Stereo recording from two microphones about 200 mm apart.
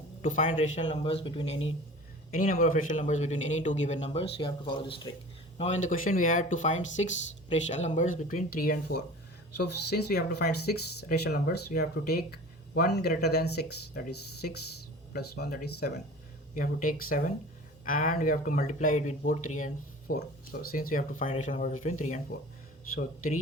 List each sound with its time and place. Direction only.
0.2 s a man's voice: 40° left (ahead or behind)
2.3 s speech: 40° left (ahead or behind); by 5.1 s 25° left (ahead or behind)
5.5 s speech: 35° left (ahead or behind)